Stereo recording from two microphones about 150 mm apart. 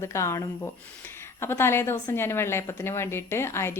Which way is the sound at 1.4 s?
15° left (ahead or behind).